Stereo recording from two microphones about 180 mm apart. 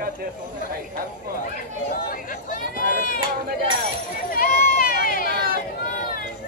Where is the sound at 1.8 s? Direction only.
55° left (ahead or behind).